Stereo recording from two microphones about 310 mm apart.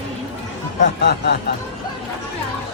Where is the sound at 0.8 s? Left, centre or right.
Left.